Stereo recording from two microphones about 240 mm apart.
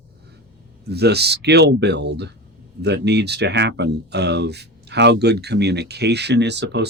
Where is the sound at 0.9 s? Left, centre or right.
Right.